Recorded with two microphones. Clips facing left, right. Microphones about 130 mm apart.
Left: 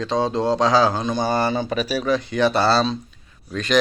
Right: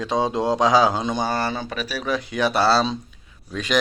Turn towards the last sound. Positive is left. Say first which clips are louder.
# left 3 dB
turn(degrees=-5)  # may be behind; listen again after turning